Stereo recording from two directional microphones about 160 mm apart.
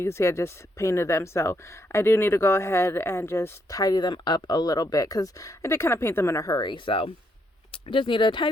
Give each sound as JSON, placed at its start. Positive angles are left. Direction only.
{"t": 0.0, "sound": "speech", "side_deg": 15}